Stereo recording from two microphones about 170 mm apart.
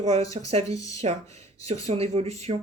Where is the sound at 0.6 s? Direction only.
20° left (ahead or behind).